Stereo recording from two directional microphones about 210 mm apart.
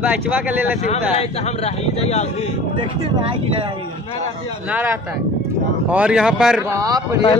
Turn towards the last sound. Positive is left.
turn(degrees=-15)  # may be behind; listen again after turning